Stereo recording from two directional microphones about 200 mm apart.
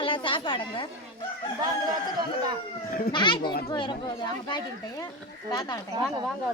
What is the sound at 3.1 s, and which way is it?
Speech, 20° left (ahead or behind).